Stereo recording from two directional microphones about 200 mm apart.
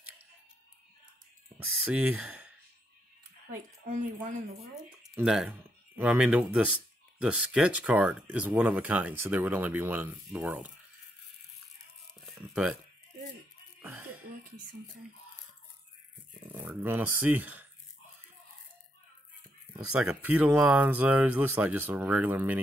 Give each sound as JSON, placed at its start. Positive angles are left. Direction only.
{"t": 1.9, "sound": "speech", "side_deg": -5}
{"t": 3.8, "sound": "speech", "side_deg": -40}
{"t": 5.0, "sound": "speech", "side_deg": -5}
{"t": 12.1, "sound": "a sound", "side_deg": 0}
{"t": 13.7, "sound": "music", "side_deg": -10}
{"t": 16.5, "sound": "speech", "side_deg": -10}
{"t": 20.0, "sound": "speech", "side_deg": -5}